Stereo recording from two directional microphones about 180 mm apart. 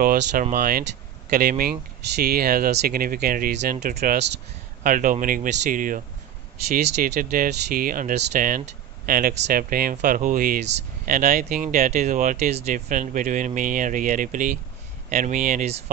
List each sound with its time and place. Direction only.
0.0 s speech: 55° right (ahead or behind)
4.8 s speech: 45° right (ahead or behind)